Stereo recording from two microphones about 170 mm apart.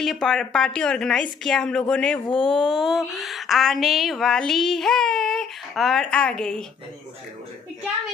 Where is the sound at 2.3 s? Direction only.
30° left (ahead or behind).